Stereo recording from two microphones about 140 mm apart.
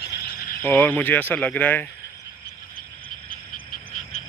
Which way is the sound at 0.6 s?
15° left (ahead or behind).